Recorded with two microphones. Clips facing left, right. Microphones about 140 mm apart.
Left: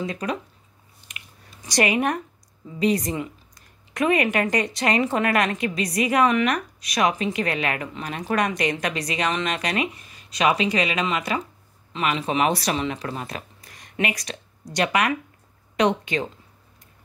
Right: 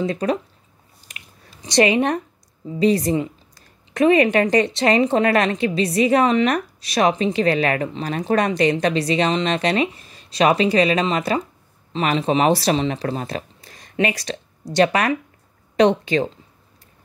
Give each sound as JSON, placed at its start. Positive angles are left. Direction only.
{"t": 0.0, "sound": "a woman's voice", "side_deg": -30}
{"t": 1.1, "sound": "a sound", "side_deg": -35}
{"t": 1.6, "sound": "a woman's voice", "side_deg": -25}